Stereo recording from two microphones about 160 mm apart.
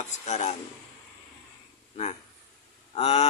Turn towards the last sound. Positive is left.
turn(degrees=40)  # may be behind; listen again after turning